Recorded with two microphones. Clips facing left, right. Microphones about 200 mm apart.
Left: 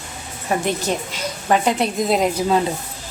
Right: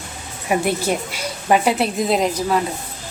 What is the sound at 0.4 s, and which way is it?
A woman's voice, 10° right (ahead or behind).